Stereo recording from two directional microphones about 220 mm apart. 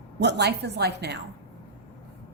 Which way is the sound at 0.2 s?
50° right (ahead or behind).